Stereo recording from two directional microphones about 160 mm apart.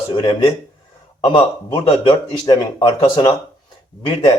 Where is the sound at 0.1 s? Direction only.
25° left (ahead or behind).